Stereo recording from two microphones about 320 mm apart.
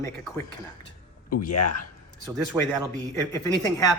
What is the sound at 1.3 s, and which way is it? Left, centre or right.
Speech, left.